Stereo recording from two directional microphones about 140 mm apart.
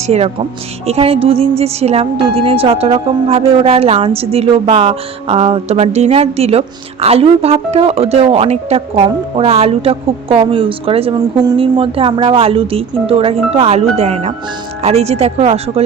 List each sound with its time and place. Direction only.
0.1 s a woman's voice: 45° right (ahead or behind)